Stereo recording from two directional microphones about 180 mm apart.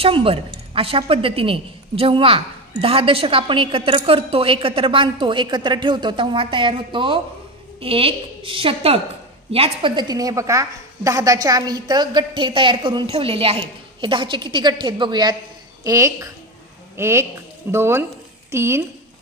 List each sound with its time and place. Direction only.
0.0 s a woman's voice: 30° right (ahead or behind); by 18.8 s 15° right (ahead or behind)